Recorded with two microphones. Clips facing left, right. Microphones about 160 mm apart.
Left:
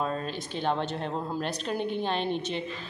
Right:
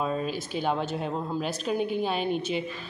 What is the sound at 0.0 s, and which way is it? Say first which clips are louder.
A woman's voice: right 2 dB; 5° right (ahead or behind).